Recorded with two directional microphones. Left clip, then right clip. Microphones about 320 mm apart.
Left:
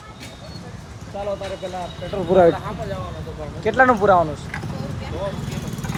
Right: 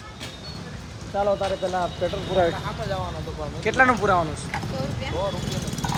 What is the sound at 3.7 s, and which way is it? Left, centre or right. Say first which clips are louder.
Speech: left 4 dB; centre.